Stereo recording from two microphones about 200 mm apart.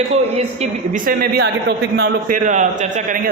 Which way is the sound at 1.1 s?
50° right (ahead or behind).